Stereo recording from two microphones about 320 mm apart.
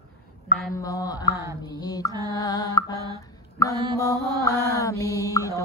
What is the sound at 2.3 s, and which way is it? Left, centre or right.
Music, centre.